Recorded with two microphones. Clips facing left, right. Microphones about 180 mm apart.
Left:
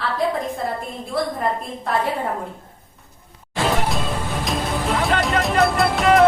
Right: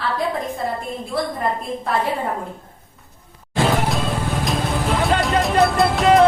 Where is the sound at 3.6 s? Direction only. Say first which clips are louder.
Right 1 dB; centre (ahead or behind).